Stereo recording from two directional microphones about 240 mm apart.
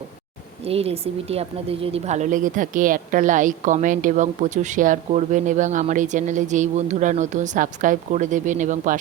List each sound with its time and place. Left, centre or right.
0.6 s speech: right